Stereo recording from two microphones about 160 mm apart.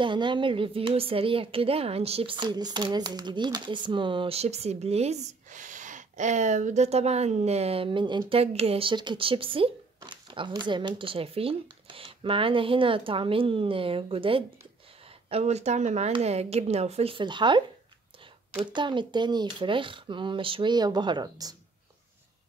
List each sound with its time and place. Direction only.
0.0 s a woman's voice: 30° right (ahead or behind)
18.7 s speech: 30° right (ahead or behind)